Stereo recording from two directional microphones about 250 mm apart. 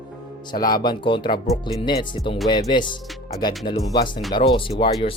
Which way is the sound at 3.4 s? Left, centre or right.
Centre.